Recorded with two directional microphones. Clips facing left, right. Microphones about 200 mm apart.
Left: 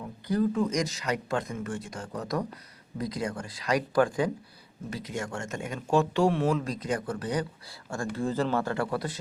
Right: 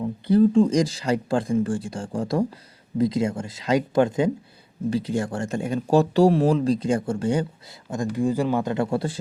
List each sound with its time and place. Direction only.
0.0 s speech: 25° right (ahead or behind)